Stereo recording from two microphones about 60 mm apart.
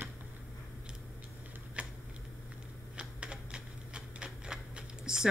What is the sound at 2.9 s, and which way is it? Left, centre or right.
Typewriter, centre.